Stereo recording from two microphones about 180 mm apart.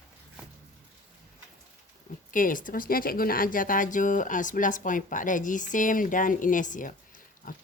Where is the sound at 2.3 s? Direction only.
50° left (ahead or behind).